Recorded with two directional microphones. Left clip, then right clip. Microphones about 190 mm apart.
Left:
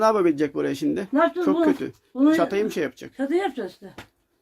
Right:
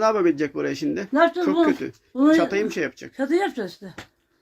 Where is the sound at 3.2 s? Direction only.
60° right (ahead or behind).